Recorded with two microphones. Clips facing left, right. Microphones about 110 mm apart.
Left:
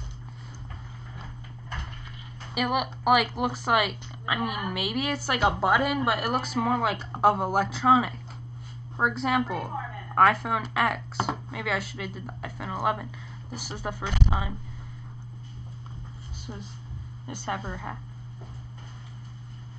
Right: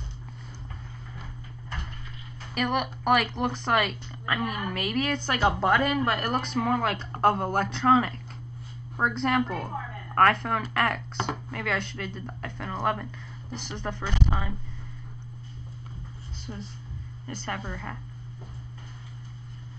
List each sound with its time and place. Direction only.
2.5 s a woman's voice: 5° left (ahead or behind)
16.5 s speech: 15° left (ahead or behind)